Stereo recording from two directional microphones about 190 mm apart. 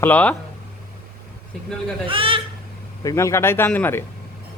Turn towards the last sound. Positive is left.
turn(degrees=10)  # may be behind; listen again after turning